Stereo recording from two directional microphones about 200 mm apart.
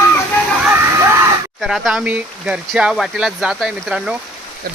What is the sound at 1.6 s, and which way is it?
Speech, centre (ahead or behind).